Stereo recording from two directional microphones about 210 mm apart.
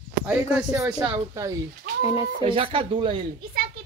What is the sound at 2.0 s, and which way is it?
Speech, 25° left (ahead or behind).